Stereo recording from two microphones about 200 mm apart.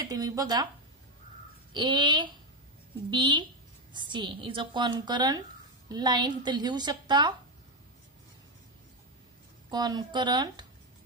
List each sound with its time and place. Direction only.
0.0 s a woman's voice: 20° right (ahead or behind)
1.7 s a woman's voice: 25° right (ahead or behind)
9.7 s a woman's voice: 20° right (ahead or behind)